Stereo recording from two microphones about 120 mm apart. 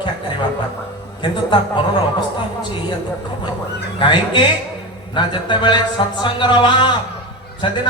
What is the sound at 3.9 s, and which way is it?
Speech, 40° left (ahead or behind).